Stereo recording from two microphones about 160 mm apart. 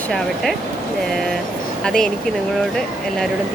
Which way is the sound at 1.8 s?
5° left (ahead or behind).